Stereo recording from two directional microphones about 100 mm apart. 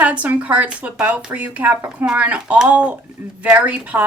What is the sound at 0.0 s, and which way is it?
Speech, 15° right (ahead or behind).